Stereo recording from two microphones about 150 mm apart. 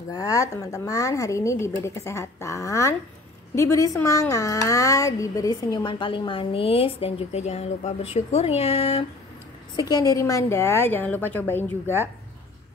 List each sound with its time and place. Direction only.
0.1 s a woman's voice: 25° left (ahead or behind); by 9.0 s 40° left (ahead or behind)
9.8 s a woman's voice: 25° left (ahead or behind)